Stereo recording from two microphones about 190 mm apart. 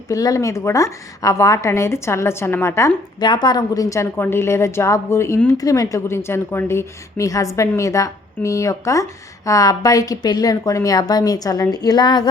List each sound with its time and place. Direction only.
0.1 s a woman's voice: 20° left (ahead or behind)